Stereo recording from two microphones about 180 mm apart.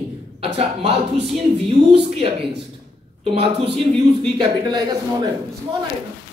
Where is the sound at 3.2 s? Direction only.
30° right (ahead or behind).